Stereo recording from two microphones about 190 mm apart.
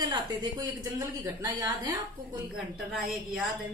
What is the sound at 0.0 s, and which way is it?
A woman's voice, 20° right (ahead or behind).